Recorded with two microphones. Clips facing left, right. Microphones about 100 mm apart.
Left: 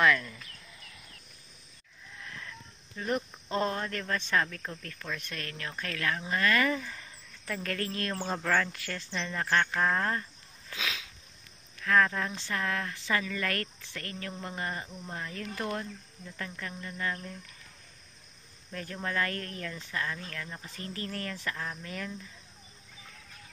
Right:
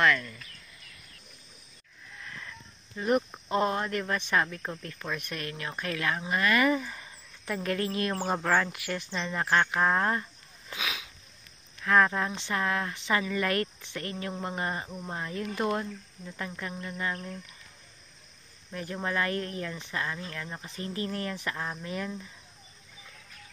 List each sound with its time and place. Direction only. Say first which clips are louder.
0.0 s speech: even; 10° left (ahead or behind)
2.2 s a sound: right 1 dB; 5° right (ahead or behind)
3.0 s speech: right 5 dB; 15° right (ahead or behind)
11.8 s speech: right 2 dB; 25° right (ahead or behind)
18.7 s speech: right 3 dB; 15° right (ahead or behind)